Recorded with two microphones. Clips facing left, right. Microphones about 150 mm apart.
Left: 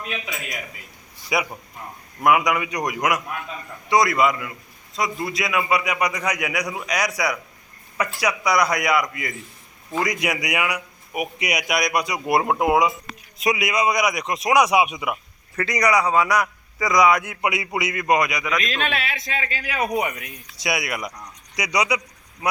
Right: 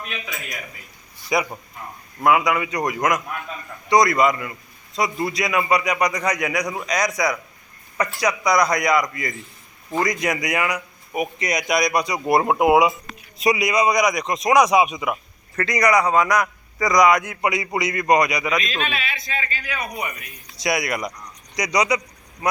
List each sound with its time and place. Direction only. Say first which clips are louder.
1.3 s a man's voice: right 2 dB; 5° left (ahead or behind)
18.9 s a man's voice: left 2 dB; 75° left (ahead or behind); by 20.2 s 90° left
20.6 s a man's voice: right 3 dB; 5° left (ahead or behind)